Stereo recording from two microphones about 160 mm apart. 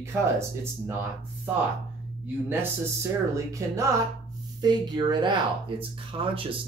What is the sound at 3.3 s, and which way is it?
Speech, 20° right (ahead or behind).